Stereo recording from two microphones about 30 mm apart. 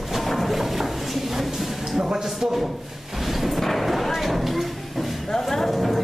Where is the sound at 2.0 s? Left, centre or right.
Right.